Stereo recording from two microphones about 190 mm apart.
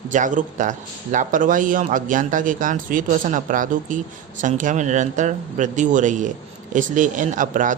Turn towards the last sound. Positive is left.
turn(degrees=-45)  # may be behind; listen again after turning